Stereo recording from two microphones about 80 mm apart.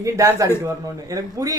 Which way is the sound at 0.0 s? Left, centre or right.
Right.